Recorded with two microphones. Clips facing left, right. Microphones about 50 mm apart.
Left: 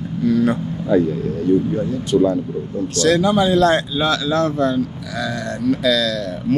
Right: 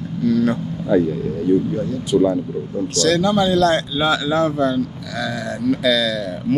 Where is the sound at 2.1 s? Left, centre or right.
Centre.